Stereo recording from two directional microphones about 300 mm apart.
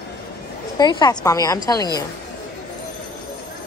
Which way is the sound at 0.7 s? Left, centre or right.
Centre.